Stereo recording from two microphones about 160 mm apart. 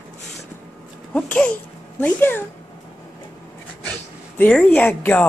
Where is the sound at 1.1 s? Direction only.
10° left (ahead or behind).